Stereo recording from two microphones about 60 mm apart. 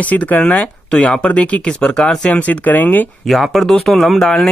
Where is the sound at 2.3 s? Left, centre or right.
Left.